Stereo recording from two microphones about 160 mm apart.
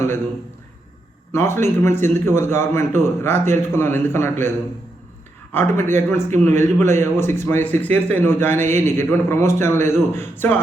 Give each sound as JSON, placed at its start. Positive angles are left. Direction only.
{"t": 1.3, "sound": "a man's voice", "side_deg": 15}